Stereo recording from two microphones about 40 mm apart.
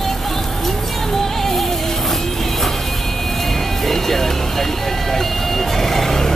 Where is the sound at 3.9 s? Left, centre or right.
Centre.